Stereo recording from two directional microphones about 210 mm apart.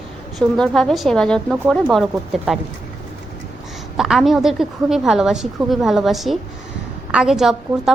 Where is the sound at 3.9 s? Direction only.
Centre (ahead or behind).